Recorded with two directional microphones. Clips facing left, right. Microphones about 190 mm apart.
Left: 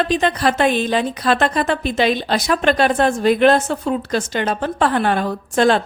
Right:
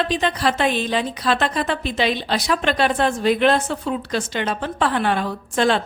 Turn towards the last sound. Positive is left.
turn(degrees=45)  # may be behind; listen again after turning